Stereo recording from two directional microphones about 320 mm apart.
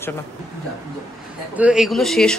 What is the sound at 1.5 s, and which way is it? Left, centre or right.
Speech, centre.